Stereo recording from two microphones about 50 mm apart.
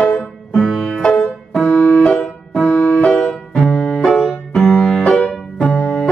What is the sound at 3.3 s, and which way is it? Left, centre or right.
Music, centre.